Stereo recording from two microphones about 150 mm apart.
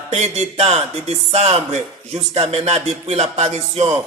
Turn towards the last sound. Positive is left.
turn(degrees=-45)  # may be behind; listen again after turning